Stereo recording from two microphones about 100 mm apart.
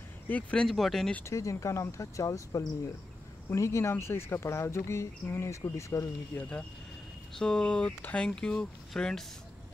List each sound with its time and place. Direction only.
0.3 s speech: 10° left (ahead or behind)
1.2 s speech: 30° left (ahead or behind)
7.3 s speech: 5° left (ahead or behind)